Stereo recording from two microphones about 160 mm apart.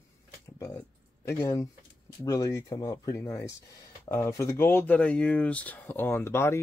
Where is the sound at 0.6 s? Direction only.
20° left (ahead or behind).